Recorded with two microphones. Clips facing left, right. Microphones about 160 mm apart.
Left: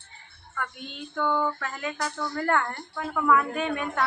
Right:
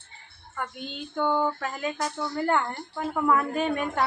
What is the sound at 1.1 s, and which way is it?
Speech, 20° right (ahead or behind).